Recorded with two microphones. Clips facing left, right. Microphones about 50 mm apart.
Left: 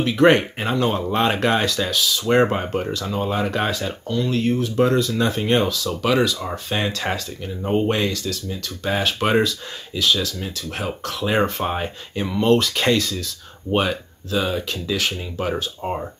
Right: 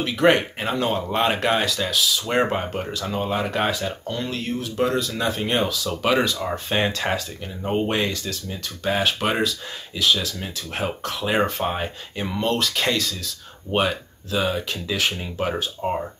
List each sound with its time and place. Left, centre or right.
0.0 s speech: centre
8.1 s speech: right
8.8 s speech: centre